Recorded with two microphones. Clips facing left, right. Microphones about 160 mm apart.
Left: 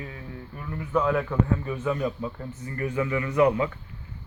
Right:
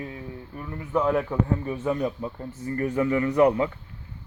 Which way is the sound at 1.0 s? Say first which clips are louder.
Right 2 dB; 35° right (ahead or behind).